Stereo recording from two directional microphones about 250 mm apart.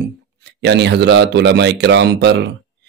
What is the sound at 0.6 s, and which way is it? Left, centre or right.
Speech, right.